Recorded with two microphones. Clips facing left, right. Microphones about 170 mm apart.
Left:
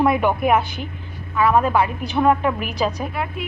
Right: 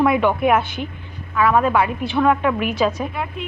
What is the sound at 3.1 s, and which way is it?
Speech, 5° left (ahead or behind).